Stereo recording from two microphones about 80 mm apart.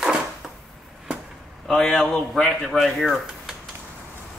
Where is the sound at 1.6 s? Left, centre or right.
Centre.